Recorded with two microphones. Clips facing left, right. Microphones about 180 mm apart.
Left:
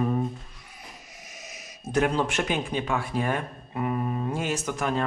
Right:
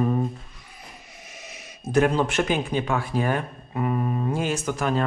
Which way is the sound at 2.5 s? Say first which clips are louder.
Right 3 dB; 5° right (ahead or behind).